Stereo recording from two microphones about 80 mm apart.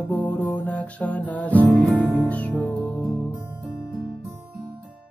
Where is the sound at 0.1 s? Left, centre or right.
Centre.